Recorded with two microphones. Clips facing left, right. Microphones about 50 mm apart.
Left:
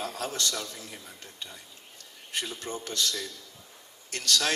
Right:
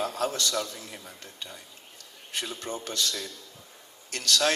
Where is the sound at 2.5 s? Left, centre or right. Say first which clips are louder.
Right 1 dB; right.